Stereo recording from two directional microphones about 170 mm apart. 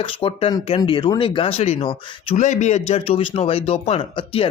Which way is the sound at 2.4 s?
45° left (ahead or behind).